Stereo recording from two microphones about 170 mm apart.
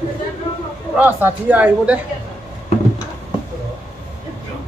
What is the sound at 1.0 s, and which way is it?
A woman's voice, 10° right (ahead or behind).